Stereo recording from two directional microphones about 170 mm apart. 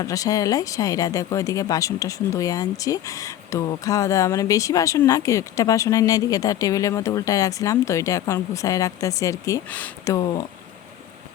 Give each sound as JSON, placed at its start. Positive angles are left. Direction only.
{"t": 0.0, "sound": "speech", "side_deg": 20}
{"t": 10.2, "sound": "speech", "side_deg": 20}